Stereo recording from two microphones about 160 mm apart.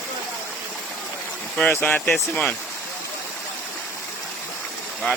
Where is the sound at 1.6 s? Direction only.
15° left (ahead or behind).